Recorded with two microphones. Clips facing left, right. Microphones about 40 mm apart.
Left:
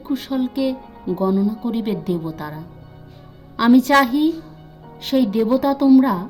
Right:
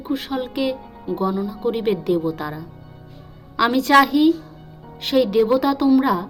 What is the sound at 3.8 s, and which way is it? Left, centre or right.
Speech, right.